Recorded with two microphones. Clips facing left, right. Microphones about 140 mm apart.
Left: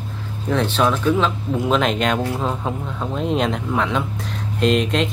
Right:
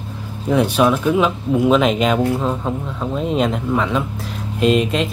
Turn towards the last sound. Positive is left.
turn(degrees=-5)  # may be behind; listen again after turning